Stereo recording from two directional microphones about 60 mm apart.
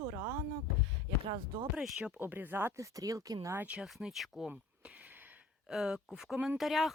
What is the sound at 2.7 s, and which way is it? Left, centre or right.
Speech, right.